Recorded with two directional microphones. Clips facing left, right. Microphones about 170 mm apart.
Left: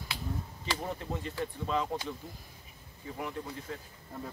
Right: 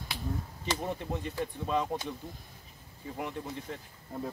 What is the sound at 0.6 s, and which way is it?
Speech, 20° right (ahead or behind).